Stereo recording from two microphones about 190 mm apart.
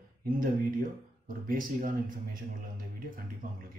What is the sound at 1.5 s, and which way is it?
Speech, 45° right (ahead or behind).